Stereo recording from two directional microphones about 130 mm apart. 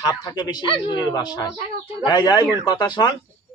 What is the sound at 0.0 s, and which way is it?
A man's voice, 30° left (ahead or behind).